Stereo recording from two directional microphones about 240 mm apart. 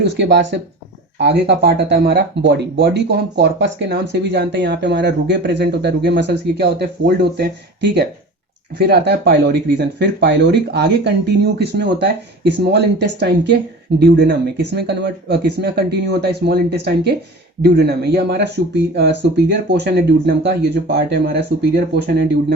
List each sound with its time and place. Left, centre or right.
0.0 s speech: right